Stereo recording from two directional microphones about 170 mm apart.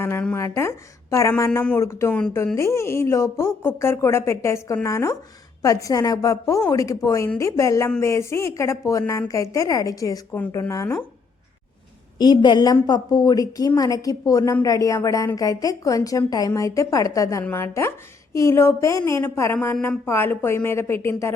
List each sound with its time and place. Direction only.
0.0 s a woman's voice: 10° left (ahead or behind)
12.2 s a woman's voice: 25° left (ahead or behind)